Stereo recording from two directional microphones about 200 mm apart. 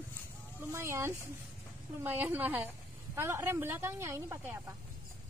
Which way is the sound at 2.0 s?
10° right (ahead or behind).